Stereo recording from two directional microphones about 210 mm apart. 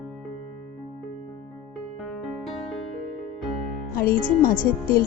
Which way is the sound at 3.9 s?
45° left (ahead or behind).